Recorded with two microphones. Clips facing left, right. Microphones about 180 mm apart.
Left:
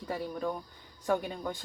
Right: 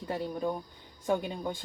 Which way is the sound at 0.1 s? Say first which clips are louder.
Right 2 dB; 15° right (ahead or behind).